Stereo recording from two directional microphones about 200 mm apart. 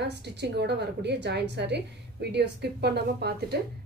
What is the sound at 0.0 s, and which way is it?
A woman's voice, 55° right (ahead or behind).